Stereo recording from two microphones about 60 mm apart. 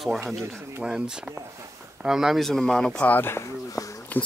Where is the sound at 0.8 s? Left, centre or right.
Centre.